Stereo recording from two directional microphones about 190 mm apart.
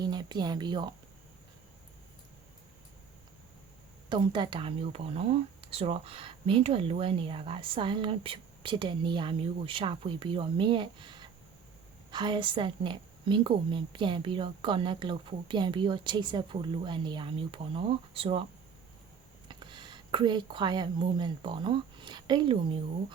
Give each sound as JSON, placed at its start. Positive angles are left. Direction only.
{"t": 0.0, "sound": "speech", "side_deg": -20}
{"t": 4.1, "sound": "speech", "side_deg": -25}
{"t": 19.5, "sound": "speech", "side_deg": -25}